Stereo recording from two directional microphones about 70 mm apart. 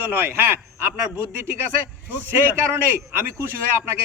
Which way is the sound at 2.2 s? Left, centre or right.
Right.